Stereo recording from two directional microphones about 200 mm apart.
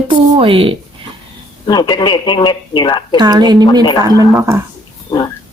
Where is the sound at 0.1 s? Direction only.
25° right (ahead or behind).